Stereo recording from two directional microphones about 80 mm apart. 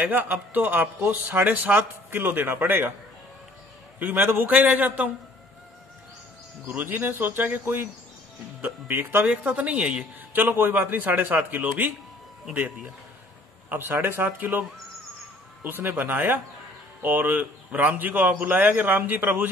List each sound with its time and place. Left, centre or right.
0.0 s a man's voice: right
4.0 s a man's voice: right
6.7 s a man's voice: right
13.7 s a man's voice: right
15.6 s a man's voice: right